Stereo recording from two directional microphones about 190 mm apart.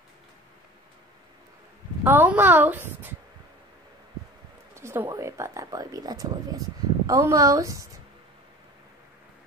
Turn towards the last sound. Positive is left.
turn(degrees=-15)  # may be behind; listen again after turning